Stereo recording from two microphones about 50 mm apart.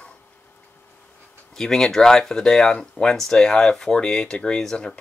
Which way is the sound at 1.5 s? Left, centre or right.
Centre.